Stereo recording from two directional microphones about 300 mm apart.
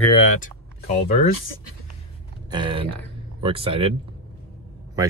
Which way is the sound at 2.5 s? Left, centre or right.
Centre.